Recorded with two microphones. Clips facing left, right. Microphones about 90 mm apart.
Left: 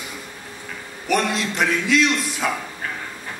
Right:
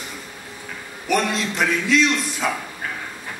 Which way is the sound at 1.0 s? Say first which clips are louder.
Even; centre (ahead or behind).